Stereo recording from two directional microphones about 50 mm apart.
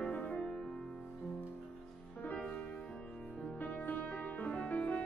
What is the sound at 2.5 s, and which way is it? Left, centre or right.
Music, left.